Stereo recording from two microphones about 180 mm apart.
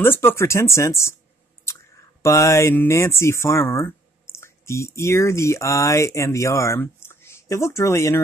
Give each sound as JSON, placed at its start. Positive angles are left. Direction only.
{"t": 0.0, "sound": "speech", "side_deg": 10}
{"t": 2.2, "sound": "speech", "side_deg": 15}